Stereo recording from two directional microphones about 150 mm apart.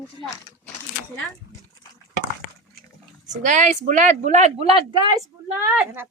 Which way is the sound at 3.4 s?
55° right (ahead or behind).